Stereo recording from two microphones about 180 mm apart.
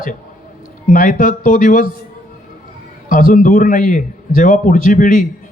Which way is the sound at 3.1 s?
50° left (ahead or behind).